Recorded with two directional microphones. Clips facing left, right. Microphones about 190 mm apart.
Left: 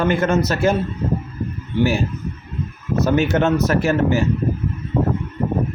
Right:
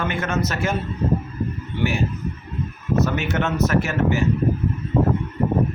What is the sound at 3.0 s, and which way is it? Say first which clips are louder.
A man's voice: left 6 dB; 35° left (ahead or behind).